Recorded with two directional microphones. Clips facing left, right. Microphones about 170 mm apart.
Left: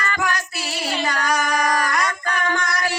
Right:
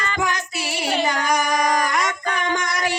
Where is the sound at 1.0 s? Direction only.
20° right (ahead or behind).